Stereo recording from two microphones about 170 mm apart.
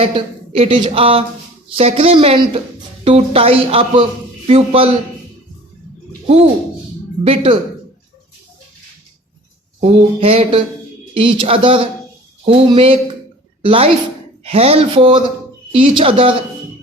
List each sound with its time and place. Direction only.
0.0 s a man's voice: 35° right (ahead or behind)
6.2 s a sound: 35° right (ahead or behind)
7.3 s a man's voice: 30° right (ahead or behind)
9.8 s a man's voice: 35° right (ahead or behind)